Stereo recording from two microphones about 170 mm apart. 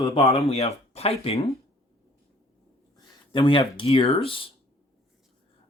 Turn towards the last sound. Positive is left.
turn(degrees=30)  # may be behind; listen again after turning